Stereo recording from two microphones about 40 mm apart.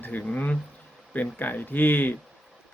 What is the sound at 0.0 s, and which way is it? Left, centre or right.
Speech, left.